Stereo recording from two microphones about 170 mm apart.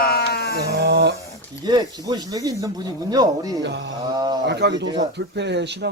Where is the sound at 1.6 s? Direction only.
25° right (ahead or behind).